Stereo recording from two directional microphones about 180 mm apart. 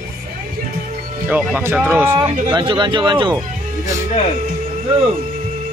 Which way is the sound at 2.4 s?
25° right (ahead or behind).